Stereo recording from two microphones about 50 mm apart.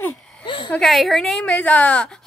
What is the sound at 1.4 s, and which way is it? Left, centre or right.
Speech, left.